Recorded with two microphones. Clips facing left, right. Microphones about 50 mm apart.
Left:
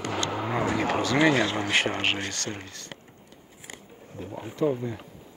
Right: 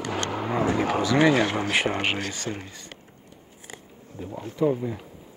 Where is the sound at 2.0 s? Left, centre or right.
Centre.